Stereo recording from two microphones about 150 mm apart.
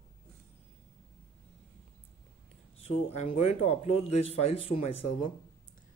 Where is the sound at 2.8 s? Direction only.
40° left (ahead or behind).